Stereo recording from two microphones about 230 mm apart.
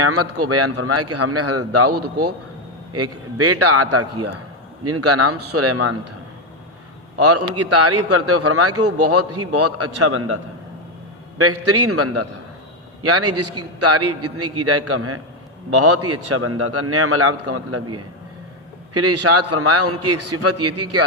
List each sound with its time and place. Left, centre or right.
0.0 s a man's voice: right
7.2 s a man's voice: right